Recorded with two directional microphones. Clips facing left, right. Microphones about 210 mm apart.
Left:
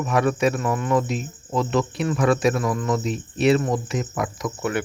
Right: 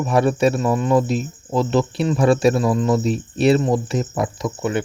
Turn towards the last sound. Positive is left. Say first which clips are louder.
# right 3 dB
turn(degrees=-25)  # may be behind; listen again after turning